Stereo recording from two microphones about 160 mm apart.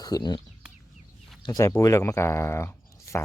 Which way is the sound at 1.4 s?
25° left (ahead or behind).